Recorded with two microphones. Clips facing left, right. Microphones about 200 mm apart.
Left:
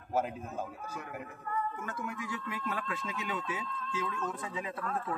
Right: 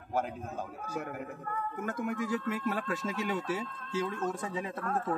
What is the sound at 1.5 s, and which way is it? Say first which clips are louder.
A man's voice: even; 55° right (ahead or behind).